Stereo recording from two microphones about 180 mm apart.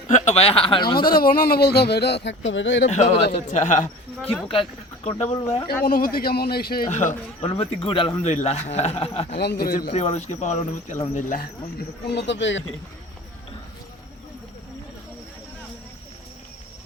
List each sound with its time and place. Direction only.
0.1 s a man's voice: 35° left (ahead or behind)
0.9 s speech: 55° left (ahead or behind); by 2.8 s 90° left
2.8 s a man's voice: 40° left (ahead or behind)
5.0 s a man's voice: 35° left (ahead or behind)
5.6 s speech: 60° left (ahead or behind)
6.8 s a man's voice: 45° left (ahead or behind)
7.5 s a man's voice: 30° left (ahead or behind)
9.4 s speech: 60° left (ahead or behind)
9.9 s a man's voice: 40° left (ahead or behind); by 12.6 s 90° left